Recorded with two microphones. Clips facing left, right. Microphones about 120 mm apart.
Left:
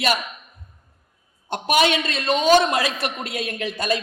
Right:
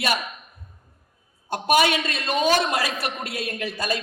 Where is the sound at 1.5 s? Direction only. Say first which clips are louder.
Even; 25° left (ahead or behind).